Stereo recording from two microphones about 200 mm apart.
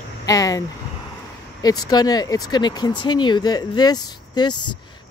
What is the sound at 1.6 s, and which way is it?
Speech, 20° left (ahead or behind).